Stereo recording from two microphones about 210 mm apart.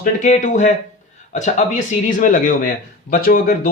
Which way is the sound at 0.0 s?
35° left (ahead or behind).